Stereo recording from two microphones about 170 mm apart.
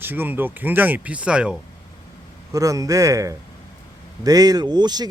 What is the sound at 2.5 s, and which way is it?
Speech, 20° right (ahead or behind).